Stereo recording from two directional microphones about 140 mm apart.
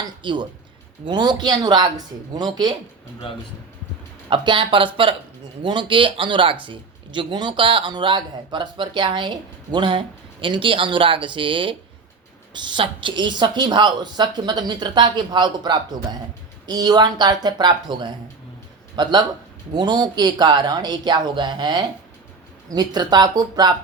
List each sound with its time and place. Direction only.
0.0 s a sound: 35° right (ahead or behind)
1.0 s a man's voice: 30° right (ahead or behind)
4.3 s a man's voice: 35° right (ahead or behind)